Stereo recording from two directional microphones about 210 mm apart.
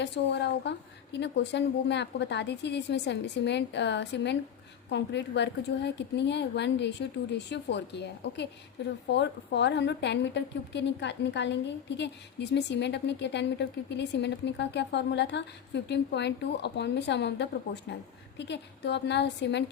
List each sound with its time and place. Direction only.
0.0 s a woman's voice: 55° left (ahead or behind)